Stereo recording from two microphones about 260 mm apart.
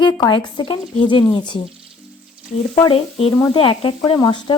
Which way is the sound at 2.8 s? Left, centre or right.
Left.